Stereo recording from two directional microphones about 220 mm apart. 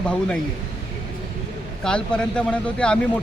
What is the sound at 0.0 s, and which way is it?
Speech, 5° left (ahead or behind).